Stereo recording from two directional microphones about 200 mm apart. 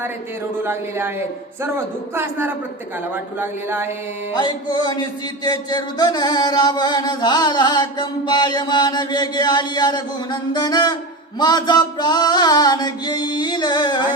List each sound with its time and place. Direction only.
0.6 s speech: 10° right (ahead or behind)
4.4 s mantra: 20° left (ahead or behind)